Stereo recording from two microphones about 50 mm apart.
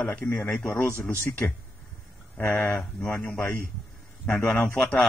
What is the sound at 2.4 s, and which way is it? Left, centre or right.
Speech, left.